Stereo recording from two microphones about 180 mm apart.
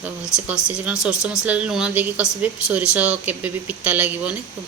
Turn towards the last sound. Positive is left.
turn(degrees=-10)  # may be behind; listen again after turning